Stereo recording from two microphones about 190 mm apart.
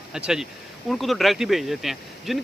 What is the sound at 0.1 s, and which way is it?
Speech, 5° right (ahead or behind).